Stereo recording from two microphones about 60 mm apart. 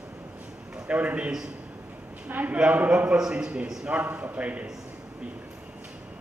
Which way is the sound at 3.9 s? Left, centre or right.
Right.